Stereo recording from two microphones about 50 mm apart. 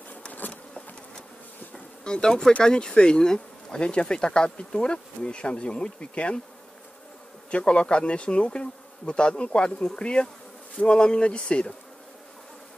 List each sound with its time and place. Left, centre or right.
2.0 s speech: centre
7.5 s speech: left